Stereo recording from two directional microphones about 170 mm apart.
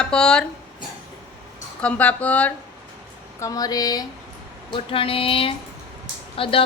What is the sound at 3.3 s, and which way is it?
Speech, 20° left (ahead or behind).